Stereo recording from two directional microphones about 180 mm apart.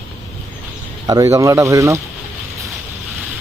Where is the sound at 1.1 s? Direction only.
20° right (ahead or behind).